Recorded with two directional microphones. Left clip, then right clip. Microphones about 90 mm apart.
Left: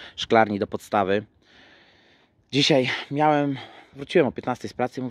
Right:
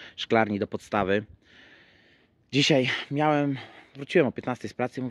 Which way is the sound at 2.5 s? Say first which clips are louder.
Left 2 dB; 25° left (ahead or behind).